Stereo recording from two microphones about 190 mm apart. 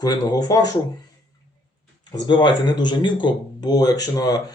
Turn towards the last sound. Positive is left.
turn(degrees=20)  # may be behind; listen again after turning